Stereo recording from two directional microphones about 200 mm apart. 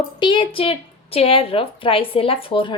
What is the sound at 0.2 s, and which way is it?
Speech, 25° left (ahead or behind).